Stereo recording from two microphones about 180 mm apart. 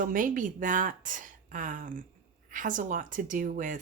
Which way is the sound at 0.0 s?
50° right (ahead or behind).